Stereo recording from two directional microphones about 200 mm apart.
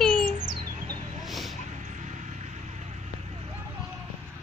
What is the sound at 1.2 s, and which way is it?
Chicken, centre (ahead or behind).